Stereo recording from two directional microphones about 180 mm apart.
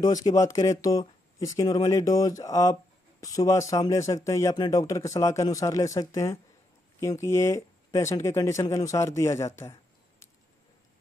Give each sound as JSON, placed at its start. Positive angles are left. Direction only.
{"t": 0.0, "sound": "speech", "side_deg": 20}